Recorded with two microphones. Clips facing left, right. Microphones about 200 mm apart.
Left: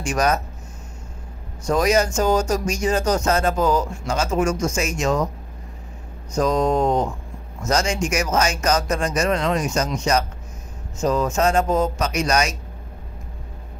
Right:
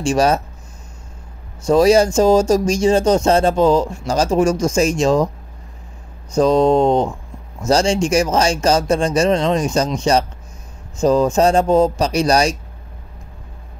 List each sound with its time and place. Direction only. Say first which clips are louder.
0.0 s speech: right 5 dB; 30° right (ahead or behind)
1.7 s speech: right 7 dB; 30° right (ahead or behind)
6.3 s speech: right 6 dB; 30° right (ahead or behind)